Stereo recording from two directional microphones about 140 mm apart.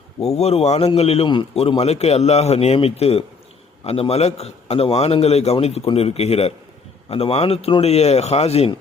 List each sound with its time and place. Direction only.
0.2 s a man's voice: 50° left (ahead or behind)